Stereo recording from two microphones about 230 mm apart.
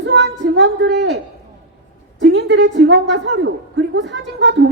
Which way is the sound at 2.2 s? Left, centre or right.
Right.